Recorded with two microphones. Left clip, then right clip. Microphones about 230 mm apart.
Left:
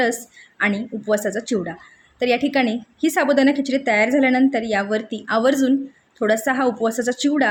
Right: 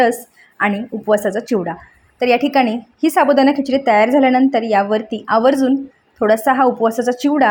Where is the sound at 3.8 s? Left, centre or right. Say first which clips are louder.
Right 6 dB; centre.